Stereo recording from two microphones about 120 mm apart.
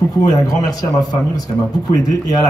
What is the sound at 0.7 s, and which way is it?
Speech, 35° left (ahead or behind).